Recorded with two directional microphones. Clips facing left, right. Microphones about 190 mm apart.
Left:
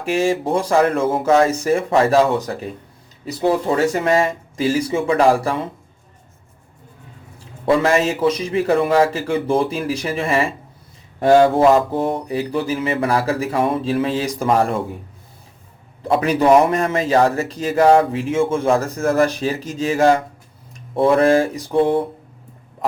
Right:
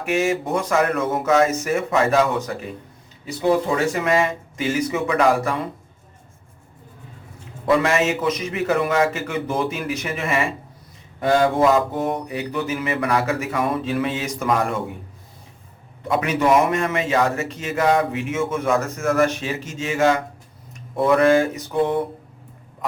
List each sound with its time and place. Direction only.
0.0 s a man's voice: 30° left (ahead or behind)
4.0 s a man's voice: 35° left (ahead or behind)
7.3 s a man's voice: 30° left (ahead or behind)
11.7 s a man's voice: 30° left (ahead or behind)
16.0 s a man's voice: 35° left (ahead or behind)